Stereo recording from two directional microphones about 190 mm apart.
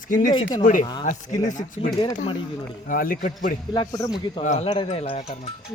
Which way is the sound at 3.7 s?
20° left (ahead or behind).